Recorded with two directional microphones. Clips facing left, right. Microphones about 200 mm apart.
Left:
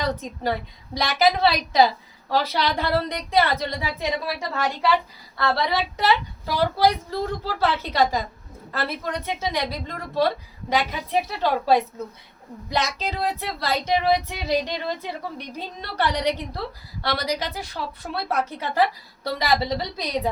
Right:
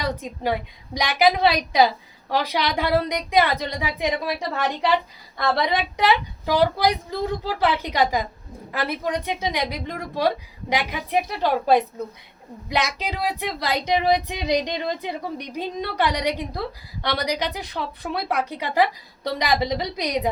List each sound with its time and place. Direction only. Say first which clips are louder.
0.0 s speech: even; 15° right (ahead or behind)